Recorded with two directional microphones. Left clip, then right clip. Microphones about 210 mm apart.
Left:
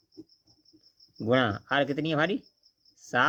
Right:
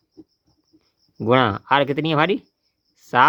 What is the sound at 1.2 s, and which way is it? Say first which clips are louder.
Speech: right 8 dB; 40° right (ahead or behind).